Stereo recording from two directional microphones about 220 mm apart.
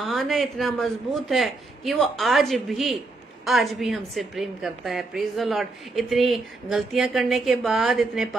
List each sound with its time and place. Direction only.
0.0 s a woman's voice: centre (ahead or behind)